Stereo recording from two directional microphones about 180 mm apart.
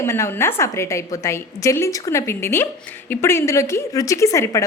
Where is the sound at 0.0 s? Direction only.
15° left (ahead or behind).